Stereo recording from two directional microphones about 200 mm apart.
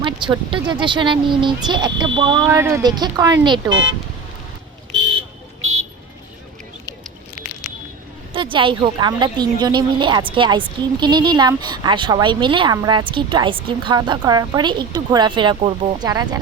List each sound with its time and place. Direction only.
0.0 s a woman's voice: 25° right (ahead or behind)
8.3 s a woman's voice: 25° right (ahead or behind)